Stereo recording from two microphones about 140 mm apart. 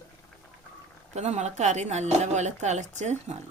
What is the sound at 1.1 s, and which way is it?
Speech, 55° right (ahead or behind).